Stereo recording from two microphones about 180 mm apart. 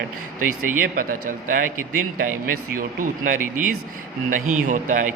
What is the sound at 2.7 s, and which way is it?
A man's voice, 50° right (ahead or behind).